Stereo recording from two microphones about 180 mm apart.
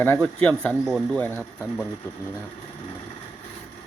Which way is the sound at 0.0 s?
10° left (ahead or behind).